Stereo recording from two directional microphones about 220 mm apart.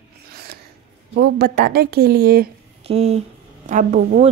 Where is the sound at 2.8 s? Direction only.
30° right (ahead or behind).